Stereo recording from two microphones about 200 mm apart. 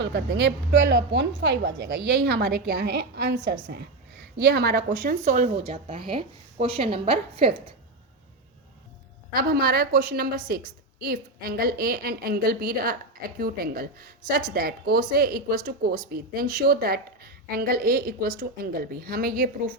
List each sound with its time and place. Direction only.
0.0 s a woman's voice: 55° right (ahead or behind); by 7.6 s 30° right (ahead or behind)
9.3 s a woman's voice: 50° right (ahead or behind)